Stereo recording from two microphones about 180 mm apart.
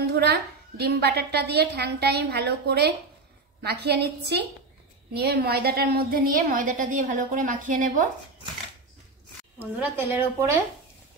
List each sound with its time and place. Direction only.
0.0 s a woman's voice: 65° right (ahead or behind); by 8.1 s 45° right (ahead or behind)
9.6 s a woman's voice: 10° right (ahead or behind)